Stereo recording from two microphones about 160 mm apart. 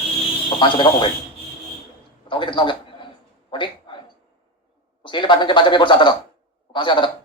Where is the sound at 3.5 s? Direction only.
30° left (ahead or behind).